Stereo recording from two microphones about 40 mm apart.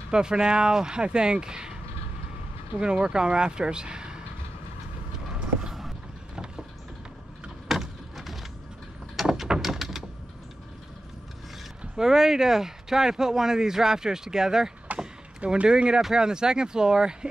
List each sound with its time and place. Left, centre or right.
0.1 s speech: right
2.8 s speech: right
5.7 s vehicle: centre
6.3 s vehicle: centre
7.6 s vehicle: centre
9.1 s a sound: centre
12.0 s speech: centre
14.9 s vehicle: right
15.4 s speech: right